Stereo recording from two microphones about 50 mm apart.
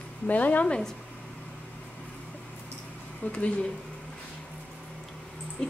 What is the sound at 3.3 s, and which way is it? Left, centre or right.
Speech, left.